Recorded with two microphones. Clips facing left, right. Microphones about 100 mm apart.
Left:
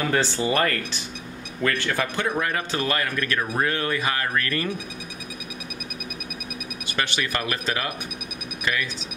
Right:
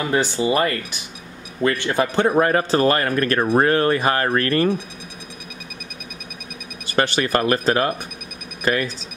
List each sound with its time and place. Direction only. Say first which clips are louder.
0.0 s speech: right 3 dB; 20° right (ahead or behind)
2.2 s a man's voice: right 8 dB; 40° right (ahead or behind)
6.9 s a man's voice: right 8 dB; 40° right (ahead or behind)